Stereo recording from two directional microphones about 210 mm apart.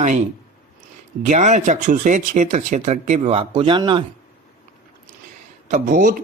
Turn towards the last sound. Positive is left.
turn(degrees=-40)  # may be behind; listen again after turning